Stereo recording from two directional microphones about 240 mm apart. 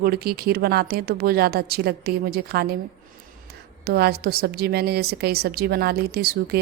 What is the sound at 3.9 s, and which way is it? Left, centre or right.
Speech, right.